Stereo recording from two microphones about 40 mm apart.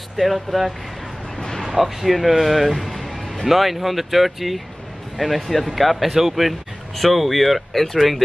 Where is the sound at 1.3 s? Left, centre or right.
Centre.